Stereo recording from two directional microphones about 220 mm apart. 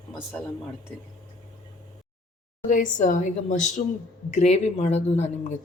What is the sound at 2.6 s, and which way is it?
Speech, 35° left (ahead or behind).